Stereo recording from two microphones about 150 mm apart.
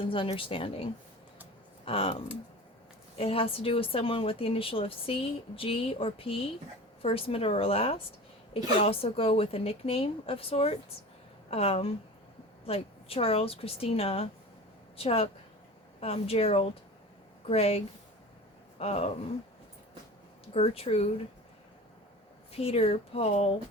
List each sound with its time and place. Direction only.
0.0 s a woman's voice: 35° left (ahead or behind)
20.5 s a woman's voice: 40° left (ahead or behind)
22.5 s a woman's voice: 40° left (ahead or behind)